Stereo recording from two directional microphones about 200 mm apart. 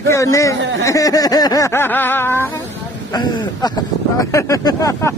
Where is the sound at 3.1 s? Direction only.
20° left (ahead or behind).